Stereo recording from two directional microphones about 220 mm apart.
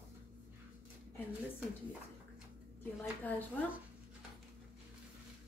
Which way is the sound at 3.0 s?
10° left (ahead or behind).